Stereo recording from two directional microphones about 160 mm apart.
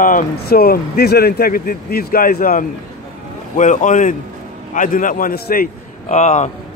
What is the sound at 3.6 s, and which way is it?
A man's voice, 50° left (ahead or behind).